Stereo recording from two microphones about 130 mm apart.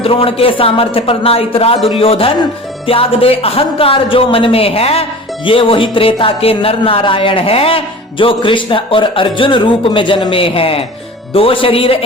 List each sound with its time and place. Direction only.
0.0 s speech: 45° left (ahead or behind)